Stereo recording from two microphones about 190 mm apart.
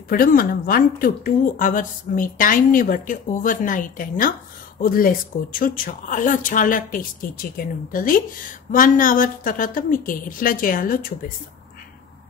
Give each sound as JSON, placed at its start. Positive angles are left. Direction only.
{"t": 0.1, "sound": "a woman's voice", "side_deg": 50}